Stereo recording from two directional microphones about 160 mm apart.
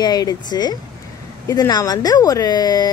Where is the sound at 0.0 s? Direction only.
25° left (ahead or behind).